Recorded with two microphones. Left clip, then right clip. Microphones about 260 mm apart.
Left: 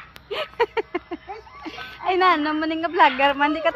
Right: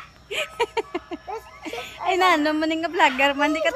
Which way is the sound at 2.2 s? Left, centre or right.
Centre.